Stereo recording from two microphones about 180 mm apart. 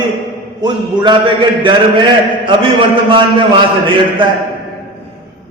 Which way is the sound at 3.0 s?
25° right (ahead or behind).